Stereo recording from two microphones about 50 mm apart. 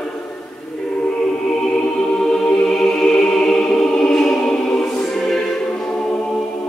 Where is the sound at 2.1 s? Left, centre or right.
Centre.